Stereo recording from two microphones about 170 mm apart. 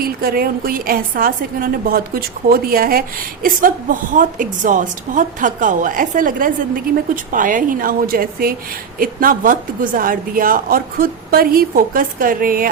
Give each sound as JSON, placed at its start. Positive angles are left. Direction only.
{"t": 0.0, "sound": "a woman's voice", "side_deg": -60}
{"t": 4.1, "sound": "a woman's voice", "side_deg": -50}